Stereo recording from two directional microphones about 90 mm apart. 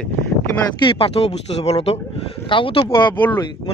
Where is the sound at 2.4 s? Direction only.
70° left (ahead or behind).